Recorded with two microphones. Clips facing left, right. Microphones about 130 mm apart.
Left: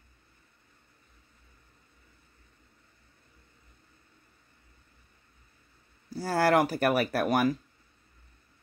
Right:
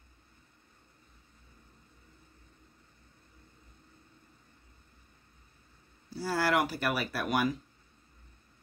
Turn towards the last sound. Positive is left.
turn(degrees=45)  # may be behind; listen again after turning